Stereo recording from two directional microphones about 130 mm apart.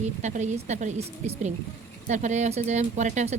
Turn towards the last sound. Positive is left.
turn(degrees=-65)  # may be behind; listen again after turning